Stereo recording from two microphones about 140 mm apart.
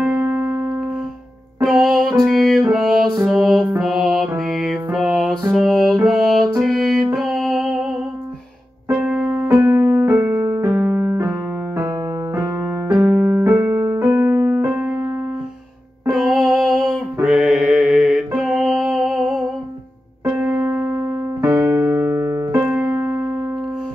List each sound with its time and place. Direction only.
0.0 s music: 15° right (ahead or behind)
1.6 s music: 5° right (ahead or behind)
16.1 s music: 5° right (ahead or behind)
16.5 s a sound: centre (ahead or behind)
16.9 s music: 5° right (ahead or behind)
20.3 s piano: 15° right (ahead or behind)